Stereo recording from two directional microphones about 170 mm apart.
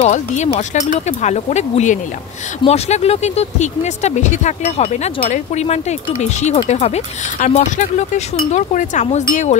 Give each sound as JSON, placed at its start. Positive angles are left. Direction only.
{"t": 0.0, "sound": "speech", "side_deg": 40}